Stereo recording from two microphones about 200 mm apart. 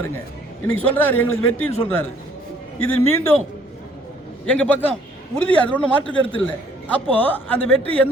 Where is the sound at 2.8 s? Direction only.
90° left.